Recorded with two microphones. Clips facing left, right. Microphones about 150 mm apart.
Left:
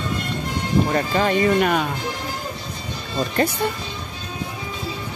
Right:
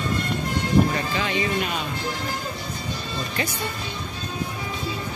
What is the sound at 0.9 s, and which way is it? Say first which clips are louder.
Speech: left 6 dB; 45° left (ahead or behind).